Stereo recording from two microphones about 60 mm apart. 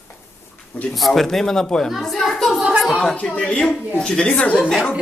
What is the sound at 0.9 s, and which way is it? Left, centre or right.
A man's voice, centre.